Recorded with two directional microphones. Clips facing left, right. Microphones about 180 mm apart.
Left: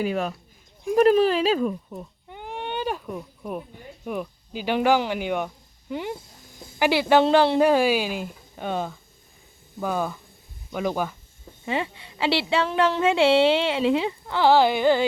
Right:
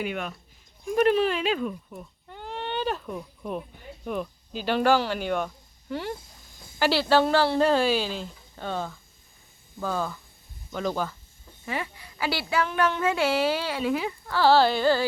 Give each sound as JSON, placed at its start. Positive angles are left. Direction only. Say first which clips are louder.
{"t": 0.0, "sound": "speech", "louder": "left 6 dB", "side_deg": 35}
{"t": 2.2, "sound": "a sound", "louder": "even", "side_deg": 15}
{"t": 4.0, "sound": "a woman's voice", "louder": "left 1 dB", "side_deg": 10}
{"t": 11.6, "sound": "a woman's voice", "louder": "left 5 dB", "side_deg": 25}